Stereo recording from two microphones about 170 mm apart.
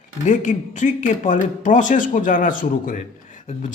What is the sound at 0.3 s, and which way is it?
Speech, 45° left (ahead or behind).